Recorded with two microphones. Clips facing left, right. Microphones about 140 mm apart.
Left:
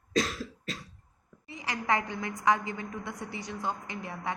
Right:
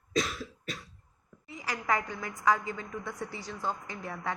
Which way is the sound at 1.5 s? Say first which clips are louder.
Left 1 dB; 25° left (ahead or behind).